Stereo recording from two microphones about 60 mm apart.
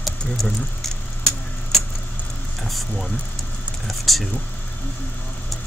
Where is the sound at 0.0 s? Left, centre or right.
Centre.